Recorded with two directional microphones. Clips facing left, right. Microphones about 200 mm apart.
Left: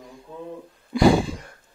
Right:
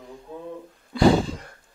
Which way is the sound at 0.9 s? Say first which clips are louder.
Left 1 dB; 10° left (ahead or behind).